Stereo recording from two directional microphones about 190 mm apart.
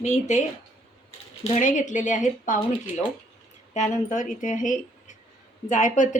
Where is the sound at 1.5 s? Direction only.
45° left (ahead or behind).